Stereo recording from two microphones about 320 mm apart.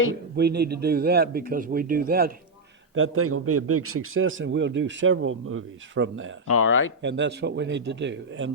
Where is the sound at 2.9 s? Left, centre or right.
Right.